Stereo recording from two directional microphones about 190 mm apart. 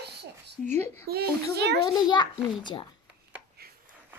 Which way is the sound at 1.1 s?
55° right (ahead or behind).